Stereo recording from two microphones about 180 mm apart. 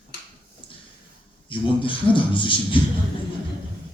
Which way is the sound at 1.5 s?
30° left (ahead or behind).